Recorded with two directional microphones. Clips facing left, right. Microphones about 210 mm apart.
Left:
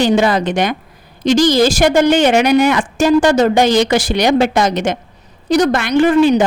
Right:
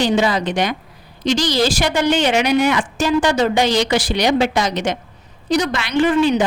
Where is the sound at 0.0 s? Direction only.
50° left (ahead or behind).